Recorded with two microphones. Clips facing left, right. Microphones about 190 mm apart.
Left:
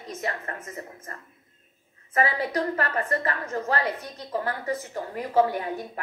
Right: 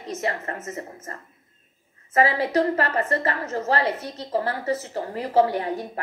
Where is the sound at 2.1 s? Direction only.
35° right (ahead or behind).